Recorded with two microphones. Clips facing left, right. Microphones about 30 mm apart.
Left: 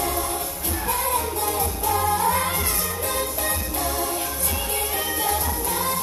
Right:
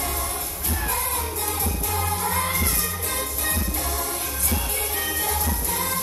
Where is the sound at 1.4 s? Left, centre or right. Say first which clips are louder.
Left 4 dB; centre.